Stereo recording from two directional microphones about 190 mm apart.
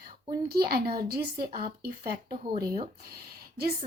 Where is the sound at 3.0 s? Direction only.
55° right (ahead or behind).